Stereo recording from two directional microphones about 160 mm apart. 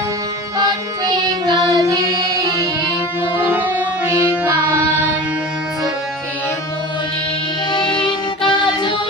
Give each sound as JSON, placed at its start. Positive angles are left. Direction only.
{"t": 0.6, "sound": "music", "side_deg": -25}
{"t": 7.7, "sound": "music", "side_deg": 30}